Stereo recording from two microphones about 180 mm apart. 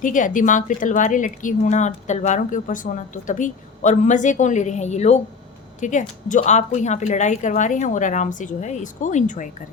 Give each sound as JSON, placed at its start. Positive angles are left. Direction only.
{"t": 0.0, "sound": "a woman's voice", "side_deg": 45}